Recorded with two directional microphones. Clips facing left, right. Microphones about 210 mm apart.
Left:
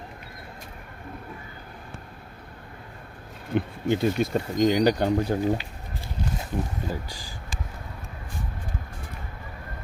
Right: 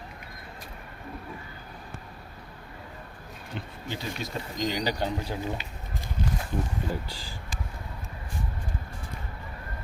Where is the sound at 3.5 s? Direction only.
55° left (ahead or behind).